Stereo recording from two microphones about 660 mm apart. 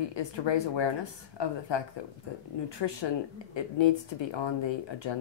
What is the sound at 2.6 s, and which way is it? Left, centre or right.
Speech, left.